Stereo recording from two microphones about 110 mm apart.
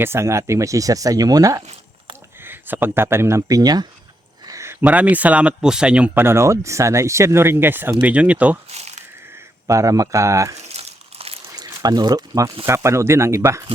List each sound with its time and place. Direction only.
0.0 s speech: 25° right (ahead or behind)
2.4 s speech: 20° right (ahead or behind)
6.2 s speech: 25° right (ahead or behind)
8.7 s a sound: 85° right
9.6 s speech: 30° right (ahead or behind)
10.6 s crumpling: 80° right; by 11.3 s 65° right (ahead or behind)
11.5 s speech: 35° right (ahead or behind)